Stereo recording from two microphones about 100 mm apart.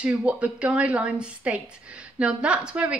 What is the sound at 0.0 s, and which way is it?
A woman's voice, 10° right (ahead or behind).